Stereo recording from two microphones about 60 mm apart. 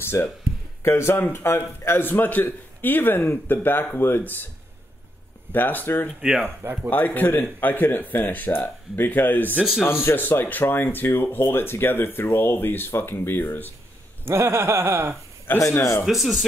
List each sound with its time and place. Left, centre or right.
0.0 s speech: left
2.0 s speech: left
5.5 s speech: left
6.6 s speech: right
6.9 s speech: left
14.2 s speech: right
15.4 s speech: left
16.1 s speech: centre